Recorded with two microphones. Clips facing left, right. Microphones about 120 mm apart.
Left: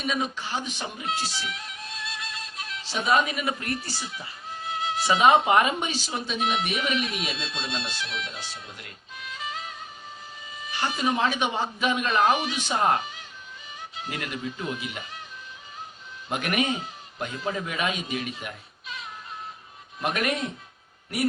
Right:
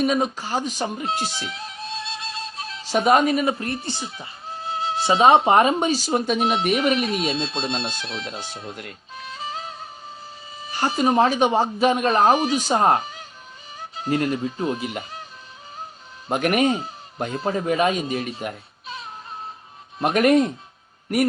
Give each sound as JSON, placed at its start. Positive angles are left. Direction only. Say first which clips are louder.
{"t": 0.0, "sound": "speech", "louder": "right 7 dB", "side_deg": -40}
{"t": 1.4, "sound": "music", "louder": "right 3 dB", "side_deg": -30}
{"t": 2.9, "sound": "speech", "louder": "right 7 dB", "side_deg": -45}
{"t": 6.4, "sound": "speech", "louder": "right 7 dB", "side_deg": -35}
{"t": 8.6, "sound": "speech", "louder": "right 9 dB", "side_deg": -50}
{"t": 9.1, "sound": "music", "louder": "right 3 dB", "side_deg": -35}
{"t": 10.6, "sound": "speech", "louder": "right 6 dB", "side_deg": -40}
{"t": 16.3, "sound": "speech", "louder": "right 7 dB", "side_deg": -40}